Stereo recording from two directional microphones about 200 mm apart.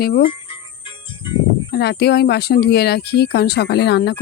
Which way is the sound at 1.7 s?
55° left (ahead or behind).